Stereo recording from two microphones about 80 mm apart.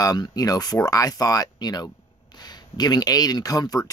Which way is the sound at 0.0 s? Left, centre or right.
Left.